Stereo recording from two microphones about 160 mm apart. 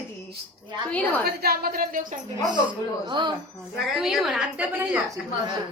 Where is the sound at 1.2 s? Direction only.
75° right (ahead or behind).